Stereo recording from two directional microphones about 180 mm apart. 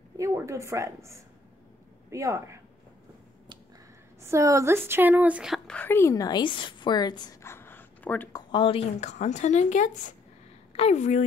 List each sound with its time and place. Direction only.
0.2 s a woman's voice: 15° right (ahead or behind)
4.2 s speech: 15° right (ahead or behind)
5.8 s a woman's voice: 15° left (ahead or behind)
8.3 s a woman's voice: 25° left (ahead or behind); by 11.2 s 40° left (ahead or behind)